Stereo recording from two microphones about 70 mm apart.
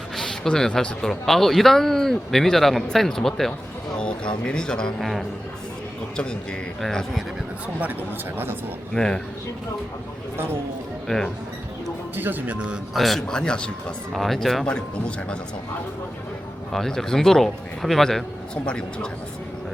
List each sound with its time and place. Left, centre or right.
0.2 s a man's voice: centre
6.8 s a man's voice: centre
8.9 s speech: centre
10.3 s speech: right
11.1 s a man's voice: centre
12.1 s speech: right
12.7 s speech: centre
14.1 s a man's voice: centre
14.7 s speech: centre
16.7 s a man's voice: centre
18.5 s speech: centre